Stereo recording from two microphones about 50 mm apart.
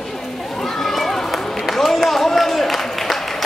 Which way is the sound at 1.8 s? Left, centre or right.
Centre.